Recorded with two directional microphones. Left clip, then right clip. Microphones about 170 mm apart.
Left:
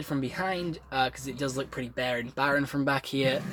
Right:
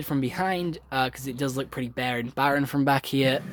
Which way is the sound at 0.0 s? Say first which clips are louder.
Right 4 dB; 55° right (ahead or behind).